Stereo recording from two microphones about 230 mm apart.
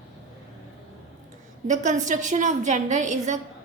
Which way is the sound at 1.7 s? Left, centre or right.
Right.